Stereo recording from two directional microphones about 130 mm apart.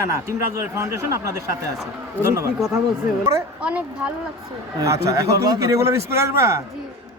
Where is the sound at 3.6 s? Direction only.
10° right (ahead or behind).